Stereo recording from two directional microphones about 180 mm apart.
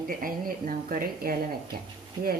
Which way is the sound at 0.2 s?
50° right (ahead or behind).